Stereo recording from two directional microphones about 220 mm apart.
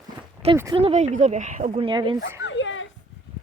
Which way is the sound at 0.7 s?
30° right (ahead or behind).